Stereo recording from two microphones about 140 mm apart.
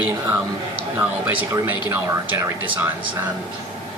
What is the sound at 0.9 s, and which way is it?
Speech, 15° right (ahead or behind).